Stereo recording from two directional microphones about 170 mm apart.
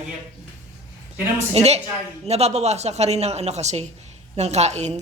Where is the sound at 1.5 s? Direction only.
40° right (ahead or behind).